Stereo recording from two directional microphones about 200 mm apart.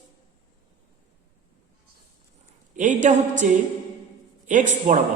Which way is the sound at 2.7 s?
40° right (ahead or behind).